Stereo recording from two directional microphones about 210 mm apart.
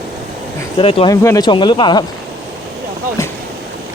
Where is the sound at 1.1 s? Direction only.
15° left (ahead or behind).